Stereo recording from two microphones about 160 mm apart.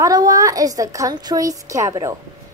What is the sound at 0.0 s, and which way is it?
A woman's voice, 20° right (ahead or behind).